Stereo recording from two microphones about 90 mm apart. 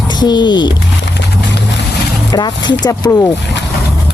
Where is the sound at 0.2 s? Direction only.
55° left (ahead or behind).